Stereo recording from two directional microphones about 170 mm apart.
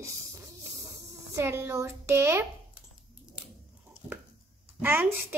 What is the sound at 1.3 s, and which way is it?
Speech, 15° right (ahead or behind).